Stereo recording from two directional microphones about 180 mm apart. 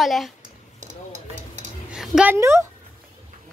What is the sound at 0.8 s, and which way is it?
Stir, 40° right (ahead or behind).